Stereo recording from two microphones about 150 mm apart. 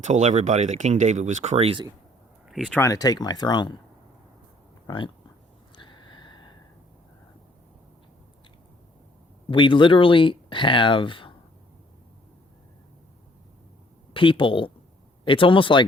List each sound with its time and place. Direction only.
0.0 s speech: 50° right (ahead or behind)
2.5 s speech: centre (ahead or behind)
2.7 s speech: 20° left (ahead or behind)
4.9 s speech: 35° left (ahead or behind)
5.7 s gasp: 30° left (ahead or behind)
9.5 s speech: 35° left (ahead or behind)
14.1 s speech: 35° left (ahead or behind)